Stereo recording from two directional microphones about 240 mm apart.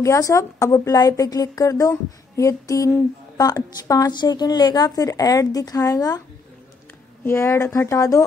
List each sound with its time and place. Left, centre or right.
0.0 s a woman's voice: centre
7.2 s a woman's voice: centre